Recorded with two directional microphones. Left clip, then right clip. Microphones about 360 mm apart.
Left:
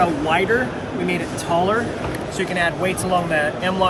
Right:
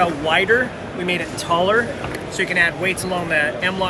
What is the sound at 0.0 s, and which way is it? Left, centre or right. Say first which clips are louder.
Speech: right 1 dB; centre.